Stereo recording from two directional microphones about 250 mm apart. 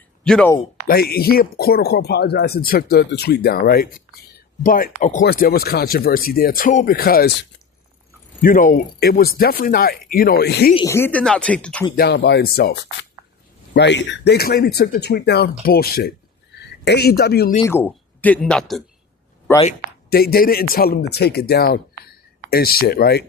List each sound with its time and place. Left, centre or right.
0.3 s speech: centre
0.9 s speech: left
8.4 s speech: left
10.8 s speech: centre
11.9 s speech: left
17.7 s speech: centre
19.6 s speech: left